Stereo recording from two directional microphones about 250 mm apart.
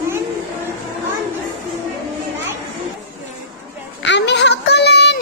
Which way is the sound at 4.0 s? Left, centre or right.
Left.